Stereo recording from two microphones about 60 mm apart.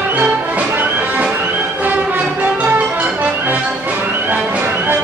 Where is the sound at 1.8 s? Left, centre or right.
Right.